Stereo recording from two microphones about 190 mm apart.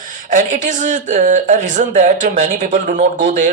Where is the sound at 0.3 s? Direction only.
40° right (ahead or behind).